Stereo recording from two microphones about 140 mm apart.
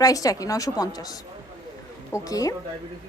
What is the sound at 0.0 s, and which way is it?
A woman's voice, 25° left (ahead or behind).